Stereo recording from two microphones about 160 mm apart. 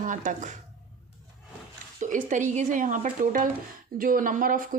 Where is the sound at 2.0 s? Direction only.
50° right (ahead or behind).